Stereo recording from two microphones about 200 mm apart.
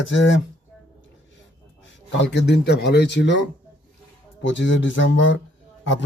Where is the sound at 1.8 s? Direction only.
60° left (ahead or behind).